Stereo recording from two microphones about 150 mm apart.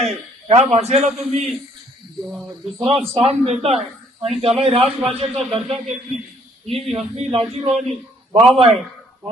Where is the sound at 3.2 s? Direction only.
45° right (ahead or behind).